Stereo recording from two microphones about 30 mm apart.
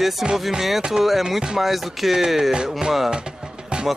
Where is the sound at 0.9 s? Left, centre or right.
Centre.